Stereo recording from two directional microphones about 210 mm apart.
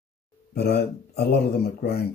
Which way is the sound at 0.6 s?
50° left (ahead or behind).